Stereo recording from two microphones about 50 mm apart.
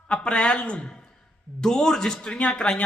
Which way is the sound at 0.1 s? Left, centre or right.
Centre.